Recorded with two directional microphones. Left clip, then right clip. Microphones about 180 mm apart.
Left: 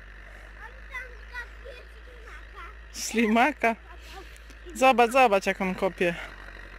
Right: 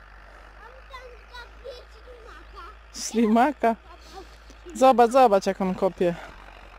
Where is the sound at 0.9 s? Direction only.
25° right (ahead or behind).